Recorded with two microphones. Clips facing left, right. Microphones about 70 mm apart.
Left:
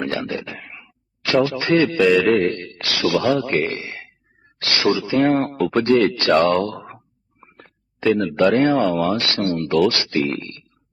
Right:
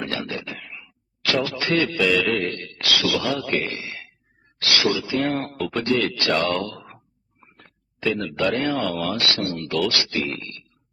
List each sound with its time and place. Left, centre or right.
0.0 s a sound: left
2.2 s a man's voice: left
8.0 s speech: left